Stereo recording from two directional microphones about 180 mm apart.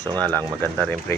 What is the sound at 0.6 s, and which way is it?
Speech, 10° left (ahead or behind).